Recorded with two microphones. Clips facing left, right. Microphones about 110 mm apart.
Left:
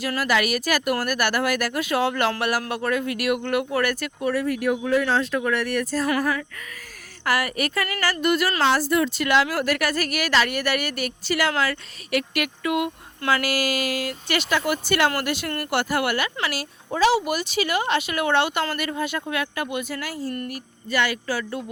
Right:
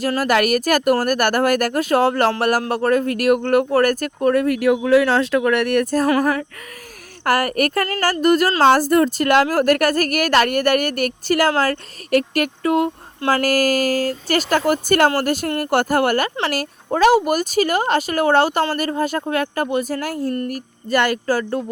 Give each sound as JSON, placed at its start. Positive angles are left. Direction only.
{"t": 0.2, "sound": "speech", "side_deg": -50}
{"t": 6.1, "sound": "a sound", "side_deg": -30}
{"t": 7.3, "sound": "speech", "side_deg": -45}